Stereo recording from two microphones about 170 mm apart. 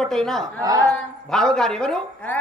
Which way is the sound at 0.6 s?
20° right (ahead or behind).